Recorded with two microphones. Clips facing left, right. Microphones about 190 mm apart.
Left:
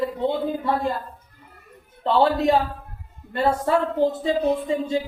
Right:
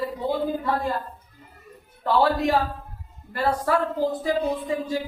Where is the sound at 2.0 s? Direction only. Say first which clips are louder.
Left 2 dB; 25° left (ahead or behind).